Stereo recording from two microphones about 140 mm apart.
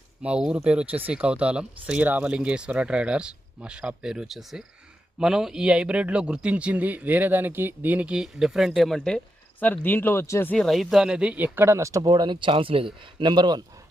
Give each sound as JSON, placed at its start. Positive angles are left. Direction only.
{"t": 0.2, "sound": "a man's voice", "side_deg": -5}